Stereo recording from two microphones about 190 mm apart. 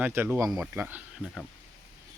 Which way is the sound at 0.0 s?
10° right (ahead or behind).